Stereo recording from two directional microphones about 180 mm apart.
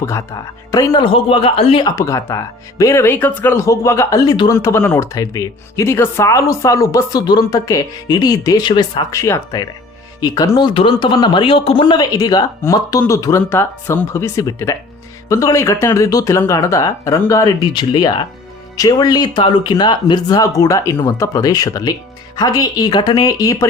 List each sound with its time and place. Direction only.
0.0 s speech: 15° left (ahead or behind)